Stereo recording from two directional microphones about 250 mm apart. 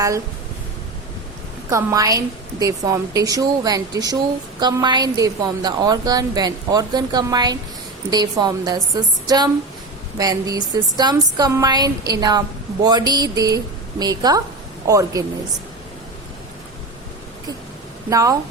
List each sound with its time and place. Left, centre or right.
1.7 s a woman's voice: centre
18.1 s a woman's voice: centre